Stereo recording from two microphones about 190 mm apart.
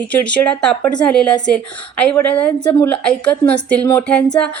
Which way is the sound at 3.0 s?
5° left (ahead or behind).